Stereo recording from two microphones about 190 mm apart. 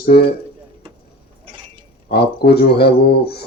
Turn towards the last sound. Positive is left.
turn(degrees=60)  # may be behind; listen again after turning